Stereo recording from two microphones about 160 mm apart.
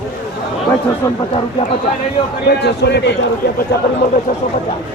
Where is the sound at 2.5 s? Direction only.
90° left.